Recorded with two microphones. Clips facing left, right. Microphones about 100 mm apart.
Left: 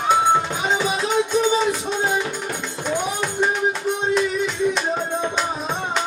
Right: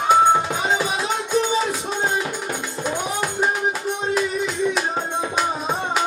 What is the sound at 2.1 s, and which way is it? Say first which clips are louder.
Music: even; centre (ahead or behind).